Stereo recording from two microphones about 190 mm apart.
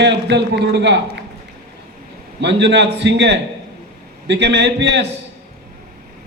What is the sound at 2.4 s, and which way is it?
A man's voice, 65° right (ahead or behind).